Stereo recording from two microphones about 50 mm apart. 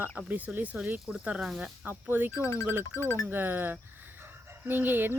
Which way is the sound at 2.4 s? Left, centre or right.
Left.